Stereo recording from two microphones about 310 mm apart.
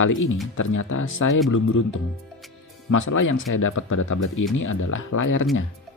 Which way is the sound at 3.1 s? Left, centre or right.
Left.